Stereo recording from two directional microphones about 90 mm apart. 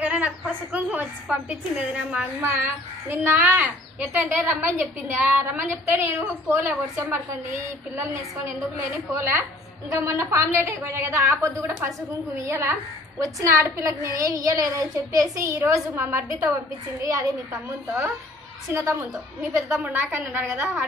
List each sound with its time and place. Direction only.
0.0 s a woman's voice: 15° right (ahead or behind)
2.4 s a child's voice: 25° right (ahead or behind)
18.7 s a woman's voice: 35° right (ahead or behind)
19.7 s a child's voice: 20° right (ahead or behind)